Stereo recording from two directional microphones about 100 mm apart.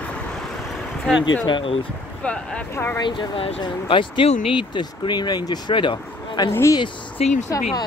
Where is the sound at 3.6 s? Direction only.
55° left (ahead or behind).